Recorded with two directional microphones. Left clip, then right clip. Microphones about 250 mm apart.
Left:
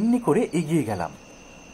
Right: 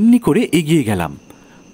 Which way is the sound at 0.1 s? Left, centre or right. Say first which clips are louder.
Right 5 dB; right.